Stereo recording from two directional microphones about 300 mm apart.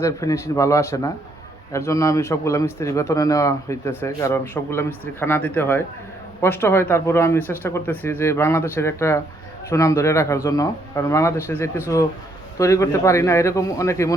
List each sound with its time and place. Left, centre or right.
0.0 s speech: centre